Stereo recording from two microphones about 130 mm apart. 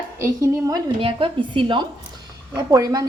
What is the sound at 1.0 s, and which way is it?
A woman's voice, 40° right (ahead or behind).